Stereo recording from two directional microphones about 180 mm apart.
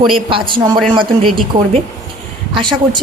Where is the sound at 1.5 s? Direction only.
45° right (ahead or behind).